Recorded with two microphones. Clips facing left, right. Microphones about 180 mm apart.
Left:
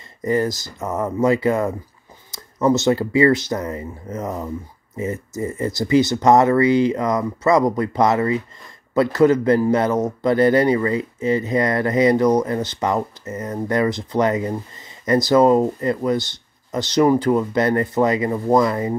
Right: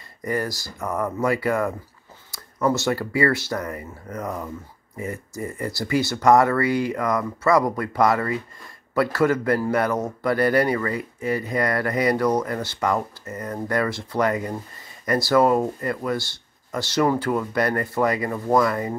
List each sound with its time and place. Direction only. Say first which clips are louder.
0.2 s speech: left 6 dB; 20° left (ahead or behind)